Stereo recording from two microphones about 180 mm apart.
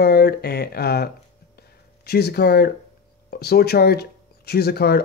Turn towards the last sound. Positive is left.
turn(degrees=60)  # may be behind; listen again after turning